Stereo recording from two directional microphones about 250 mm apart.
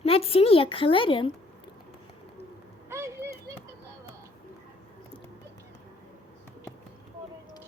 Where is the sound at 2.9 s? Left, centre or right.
Centre.